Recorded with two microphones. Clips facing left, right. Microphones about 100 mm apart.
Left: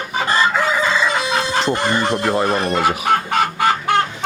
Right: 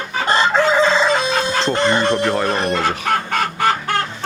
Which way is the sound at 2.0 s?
15° left (ahead or behind).